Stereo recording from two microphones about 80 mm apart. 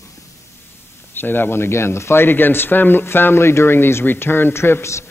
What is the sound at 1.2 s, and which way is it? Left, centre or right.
Speech, left.